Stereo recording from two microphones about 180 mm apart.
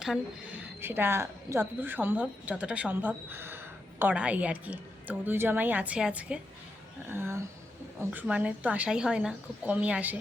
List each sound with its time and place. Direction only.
0.0 s speech: 5° right (ahead or behind)